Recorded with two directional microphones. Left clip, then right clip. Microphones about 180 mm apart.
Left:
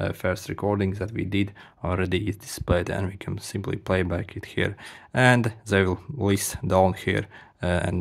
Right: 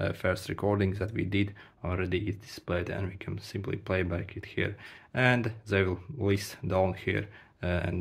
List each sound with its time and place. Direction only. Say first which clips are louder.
0.0 s speech: left 3 dB; 25° left (ahead or behind)